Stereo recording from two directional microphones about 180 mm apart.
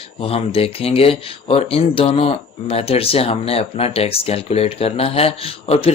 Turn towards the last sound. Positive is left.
turn(degrees=35)  # may be behind; listen again after turning